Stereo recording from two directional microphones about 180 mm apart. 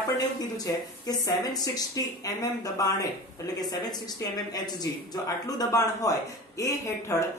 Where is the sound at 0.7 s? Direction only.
20° left (ahead or behind).